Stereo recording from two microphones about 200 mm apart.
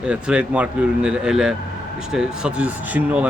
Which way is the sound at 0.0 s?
5° right (ahead or behind).